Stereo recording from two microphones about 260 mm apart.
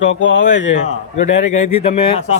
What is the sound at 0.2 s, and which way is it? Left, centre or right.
Speech, left.